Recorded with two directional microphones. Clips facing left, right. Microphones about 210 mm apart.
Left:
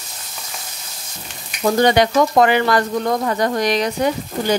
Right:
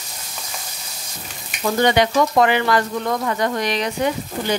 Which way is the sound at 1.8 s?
40° left (ahead or behind).